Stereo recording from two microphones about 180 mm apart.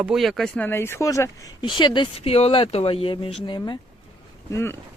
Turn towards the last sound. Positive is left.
turn(degrees=15)  # may be behind; listen again after turning